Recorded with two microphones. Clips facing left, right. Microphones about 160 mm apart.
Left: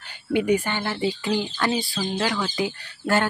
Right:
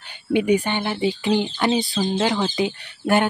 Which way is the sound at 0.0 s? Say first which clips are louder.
Right 2 dB; 20° right (ahead or behind).